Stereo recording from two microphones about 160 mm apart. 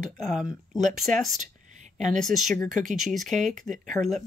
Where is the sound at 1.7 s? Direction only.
45° right (ahead or behind).